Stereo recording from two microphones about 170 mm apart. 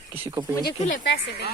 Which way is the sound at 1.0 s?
75° left (ahead or behind).